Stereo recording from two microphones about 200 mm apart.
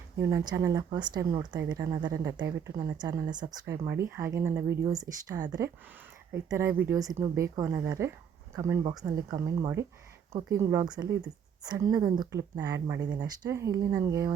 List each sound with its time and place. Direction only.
0.2 s speech: 15° right (ahead or behind)